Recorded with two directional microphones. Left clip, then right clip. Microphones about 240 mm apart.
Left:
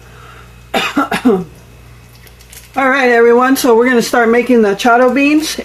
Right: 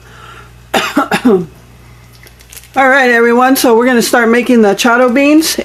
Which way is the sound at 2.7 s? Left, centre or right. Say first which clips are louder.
Right 3 dB; right.